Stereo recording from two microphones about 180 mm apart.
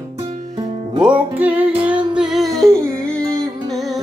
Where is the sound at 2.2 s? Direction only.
Centre (ahead or behind).